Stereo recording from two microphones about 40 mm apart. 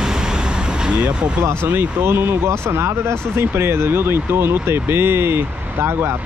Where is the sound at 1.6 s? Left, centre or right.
Right.